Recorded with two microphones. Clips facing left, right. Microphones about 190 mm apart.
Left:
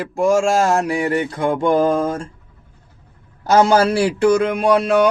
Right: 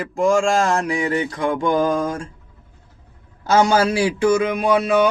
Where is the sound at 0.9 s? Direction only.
35° left (ahead or behind).